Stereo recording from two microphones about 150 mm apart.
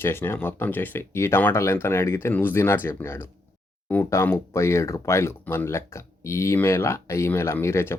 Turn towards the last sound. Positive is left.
turn(degrees=15)  # may be behind; listen again after turning